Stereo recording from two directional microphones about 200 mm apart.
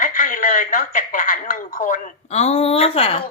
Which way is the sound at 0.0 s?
40° left (ahead or behind).